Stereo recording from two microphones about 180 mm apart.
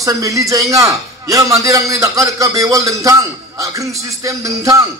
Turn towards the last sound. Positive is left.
turn(degrees=-15)  # may be behind; listen again after turning